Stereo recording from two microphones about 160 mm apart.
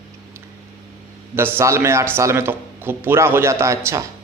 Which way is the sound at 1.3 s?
15° right (ahead or behind).